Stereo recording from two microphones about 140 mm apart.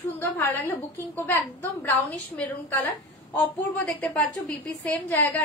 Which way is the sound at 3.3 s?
10° left (ahead or behind).